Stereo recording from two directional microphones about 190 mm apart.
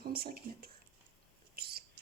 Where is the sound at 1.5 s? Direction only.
55° right (ahead or behind).